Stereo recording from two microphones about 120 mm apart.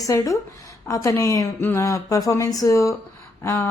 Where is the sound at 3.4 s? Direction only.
20° left (ahead or behind).